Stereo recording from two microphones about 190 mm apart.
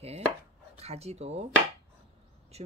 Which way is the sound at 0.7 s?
35° right (ahead or behind).